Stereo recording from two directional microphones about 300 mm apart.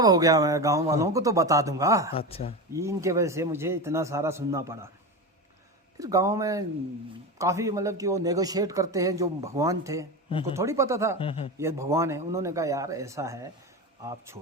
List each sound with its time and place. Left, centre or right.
0.0 s speech: centre
2.1 s speech: centre
2.7 s speech: centre
6.0 s speech: centre
11.2 s speech: centre
11.5 s speech: centre